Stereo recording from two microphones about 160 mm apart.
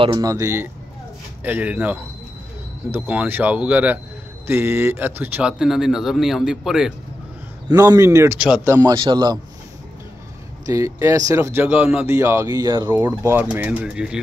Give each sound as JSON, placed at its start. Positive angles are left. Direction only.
{"t": 0.0, "sound": "speech", "side_deg": -25}
{"t": 7.6, "sound": "speech", "side_deg": -20}
{"t": 8.7, "sound": "speech", "side_deg": -25}
{"t": 10.7, "sound": "speech", "side_deg": -20}
{"t": 12.9, "sound": "speech", "side_deg": -15}